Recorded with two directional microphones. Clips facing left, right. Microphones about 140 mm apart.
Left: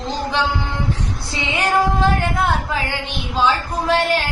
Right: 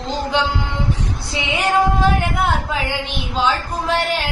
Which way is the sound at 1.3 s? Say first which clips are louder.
Even; 15° right (ahead or behind).